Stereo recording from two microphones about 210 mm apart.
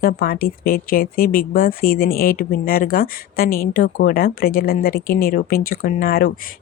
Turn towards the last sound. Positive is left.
turn(degrees=45)  # may be behind; listen again after turning